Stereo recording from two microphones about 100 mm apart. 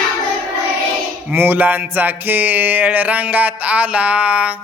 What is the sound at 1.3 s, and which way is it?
Mantra, 20° right (ahead or behind).